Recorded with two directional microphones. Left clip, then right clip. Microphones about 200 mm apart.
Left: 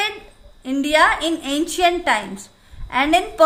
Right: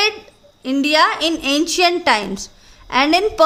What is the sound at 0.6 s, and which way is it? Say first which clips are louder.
A woman's voice: right 1 dB; 55° right (ahead or behind).